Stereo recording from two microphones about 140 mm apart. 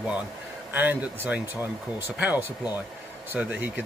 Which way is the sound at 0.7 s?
15° right (ahead or behind).